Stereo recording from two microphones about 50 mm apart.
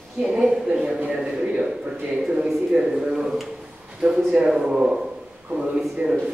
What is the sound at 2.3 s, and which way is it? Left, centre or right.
Speech, right.